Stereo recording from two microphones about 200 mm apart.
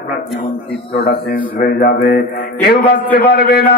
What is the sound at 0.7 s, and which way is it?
Speech, 25° left (ahead or behind).